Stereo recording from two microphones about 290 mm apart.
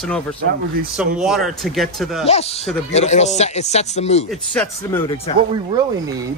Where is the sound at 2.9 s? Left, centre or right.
Left.